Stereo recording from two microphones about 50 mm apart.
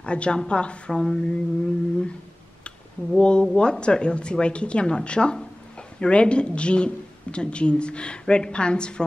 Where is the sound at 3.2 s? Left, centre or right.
Centre.